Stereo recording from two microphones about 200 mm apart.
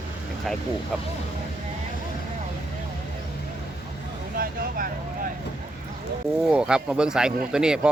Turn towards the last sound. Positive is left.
turn(degrees=-5)  # may be behind; listen again after turning